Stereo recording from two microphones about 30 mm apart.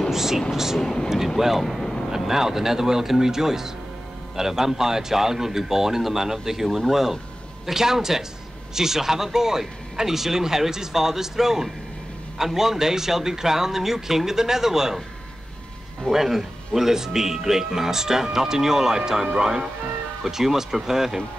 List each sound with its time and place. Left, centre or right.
0.1 s speech: centre
1.8 s vehicle: centre
2.0 s speech: centre
16.1 s speech: centre